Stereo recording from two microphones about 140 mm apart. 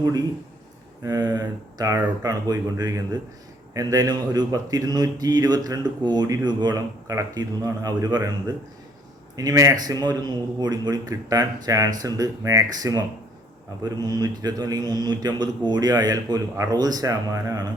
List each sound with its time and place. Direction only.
0.0 s a man's voice: 25° right (ahead or behind)